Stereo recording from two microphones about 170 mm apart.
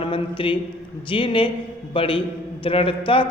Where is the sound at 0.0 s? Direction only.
30° left (ahead or behind).